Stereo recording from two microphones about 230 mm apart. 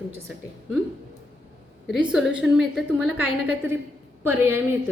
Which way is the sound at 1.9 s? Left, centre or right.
Centre.